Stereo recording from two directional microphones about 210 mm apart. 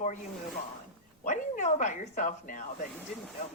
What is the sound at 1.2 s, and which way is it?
Speech, 35° left (ahead or behind).